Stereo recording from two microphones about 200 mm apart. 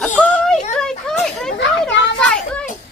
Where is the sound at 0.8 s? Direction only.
5° left (ahead or behind).